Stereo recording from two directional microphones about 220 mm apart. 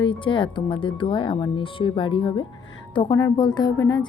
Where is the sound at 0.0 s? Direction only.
20° left (ahead or behind).